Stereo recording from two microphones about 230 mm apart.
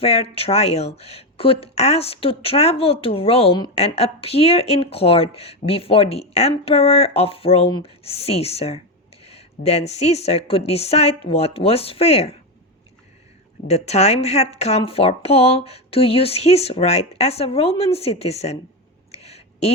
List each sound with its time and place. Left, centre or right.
0.0 s speech: left
13.7 s speech: left
19.1 s a sound: left